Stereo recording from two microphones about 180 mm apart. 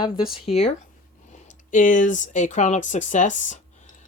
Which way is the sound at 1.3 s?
45° left (ahead or behind).